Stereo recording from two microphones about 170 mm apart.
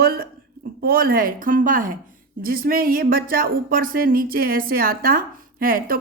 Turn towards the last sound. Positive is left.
turn(degrees=-55)  # may be behind; listen again after turning